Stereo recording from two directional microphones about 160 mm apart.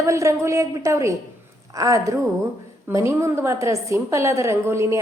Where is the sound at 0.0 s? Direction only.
20° right (ahead or behind).